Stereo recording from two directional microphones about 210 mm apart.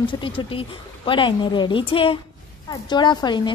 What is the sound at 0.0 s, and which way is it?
A woman's voice, 25° left (ahead or behind).